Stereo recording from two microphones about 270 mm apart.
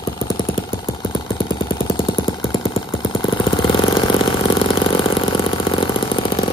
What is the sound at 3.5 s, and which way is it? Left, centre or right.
Engine, centre.